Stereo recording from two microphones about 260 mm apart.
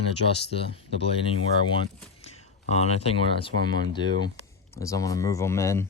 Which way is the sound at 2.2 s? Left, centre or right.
Left.